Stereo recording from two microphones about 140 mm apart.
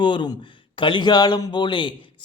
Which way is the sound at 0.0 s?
35° left (ahead or behind).